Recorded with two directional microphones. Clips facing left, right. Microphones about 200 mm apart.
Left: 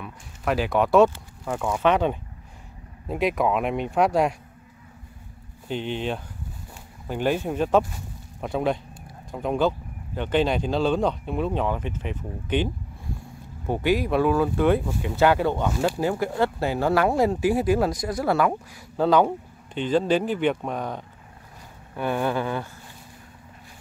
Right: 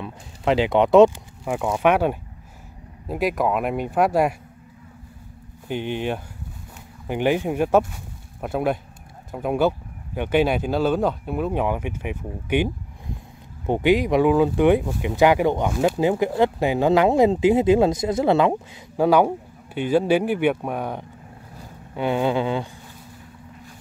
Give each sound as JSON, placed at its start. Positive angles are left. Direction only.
{"t": 0.0, "sound": "speech", "side_deg": -20}
{"t": 5.7, "sound": "speech", "side_deg": -10}
{"t": 13.7, "sound": "speech", "side_deg": -20}
{"t": 18.9, "sound": "speech", "side_deg": -10}